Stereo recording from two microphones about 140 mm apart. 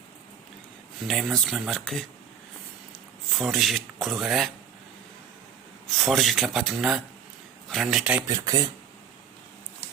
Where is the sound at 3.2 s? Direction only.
Centre (ahead or behind).